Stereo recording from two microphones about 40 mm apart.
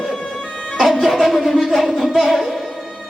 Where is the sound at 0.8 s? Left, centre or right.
Centre.